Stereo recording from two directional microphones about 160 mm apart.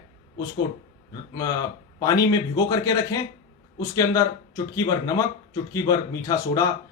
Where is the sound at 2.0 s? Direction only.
25° left (ahead or behind).